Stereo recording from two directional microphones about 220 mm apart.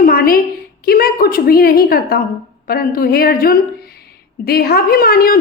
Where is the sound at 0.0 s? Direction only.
40° left (ahead or behind).